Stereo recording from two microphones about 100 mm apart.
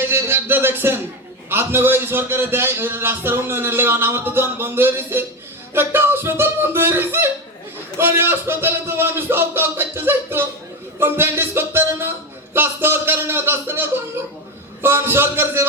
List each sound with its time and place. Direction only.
0.1 s a man's voice: 20° right (ahead or behind)